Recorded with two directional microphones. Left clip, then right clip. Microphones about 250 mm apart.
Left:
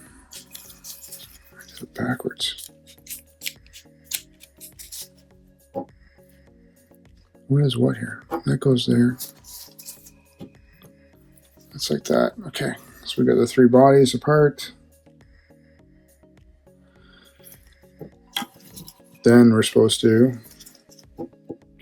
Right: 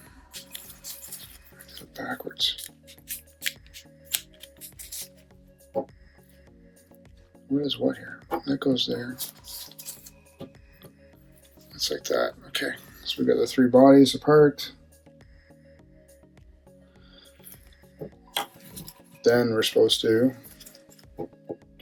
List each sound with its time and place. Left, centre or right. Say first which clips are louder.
1.5 s music: left 6 dB; left
4.9 s music: left 1 dB; centre
7.5 s speech: left 4 dB; left
11.7 s speech: left 5 dB; centre; by 14.8 s left
18.3 s tick-tock: left 1 dB; centre
19.2 s speech: left 6 dB; left